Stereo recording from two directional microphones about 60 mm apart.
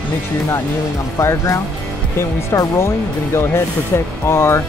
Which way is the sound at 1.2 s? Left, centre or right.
Left.